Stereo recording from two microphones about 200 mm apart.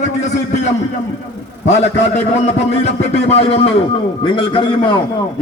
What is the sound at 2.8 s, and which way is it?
A man's voice, 35° left (ahead or behind).